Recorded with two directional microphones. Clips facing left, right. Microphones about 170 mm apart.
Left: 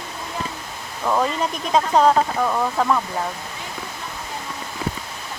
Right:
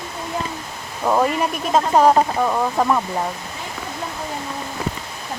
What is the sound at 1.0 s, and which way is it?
Speech, 15° right (ahead or behind).